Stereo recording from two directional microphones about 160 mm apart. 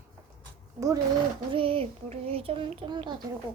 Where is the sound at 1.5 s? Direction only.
35° right (ahead or behind).